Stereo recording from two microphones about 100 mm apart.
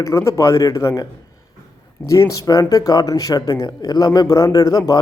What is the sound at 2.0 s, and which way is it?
A man's voice, 30° left (ahead or behind).